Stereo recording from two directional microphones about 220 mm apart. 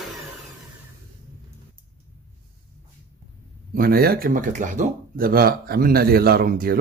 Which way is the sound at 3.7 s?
45° right (ahead or behind).